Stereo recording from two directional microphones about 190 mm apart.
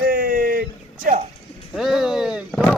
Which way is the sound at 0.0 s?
50° right (ahead or behind).